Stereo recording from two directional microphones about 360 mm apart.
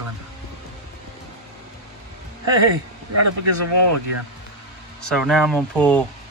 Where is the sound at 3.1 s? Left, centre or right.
Right.